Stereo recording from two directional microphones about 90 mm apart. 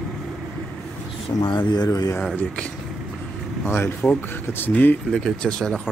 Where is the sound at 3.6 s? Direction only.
25° left (ahead or behind).